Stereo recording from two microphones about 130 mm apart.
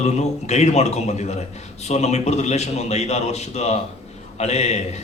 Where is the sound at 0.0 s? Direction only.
60° left (ahead or behind).